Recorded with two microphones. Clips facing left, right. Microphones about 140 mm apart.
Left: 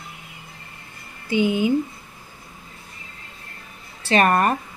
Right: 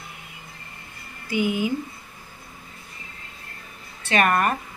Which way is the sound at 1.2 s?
25° left (ahead or behind).